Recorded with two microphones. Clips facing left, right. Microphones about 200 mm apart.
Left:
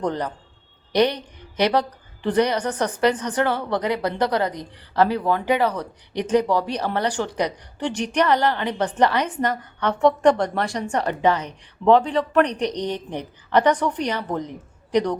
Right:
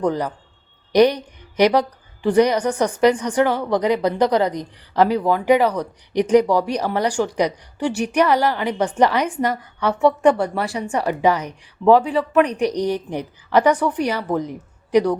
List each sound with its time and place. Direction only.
0.0 s a woman's voice: 10° right (ahead or behind)